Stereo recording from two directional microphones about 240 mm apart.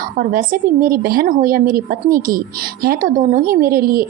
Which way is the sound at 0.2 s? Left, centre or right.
Right.